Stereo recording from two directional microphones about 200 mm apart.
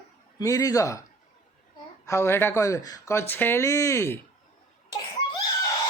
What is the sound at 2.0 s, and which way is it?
Speech, 15° left (ahead or behind).